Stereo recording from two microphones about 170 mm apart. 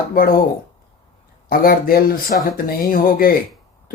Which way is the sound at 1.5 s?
60° left (ahead or behind).